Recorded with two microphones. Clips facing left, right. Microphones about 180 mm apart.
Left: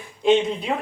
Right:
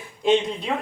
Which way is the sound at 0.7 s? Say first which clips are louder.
Even; 10° left (ahead or behind).